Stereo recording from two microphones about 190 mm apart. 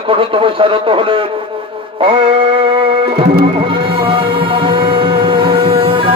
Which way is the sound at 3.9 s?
25° right (ahead or behind).